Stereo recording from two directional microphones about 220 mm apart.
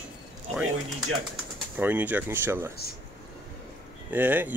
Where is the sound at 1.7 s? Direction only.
10° right (ahead or behind).